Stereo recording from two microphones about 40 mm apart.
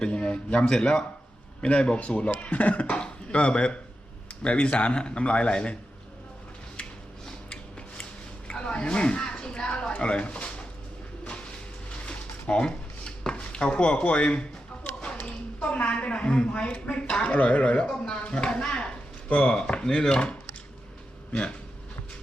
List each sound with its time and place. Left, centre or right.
0.0 s a man's voice: left
8.4 s a sound: left
11.9 s chopping: left
15.3 s a woman's voice: left
17.8 s a woman's voice: left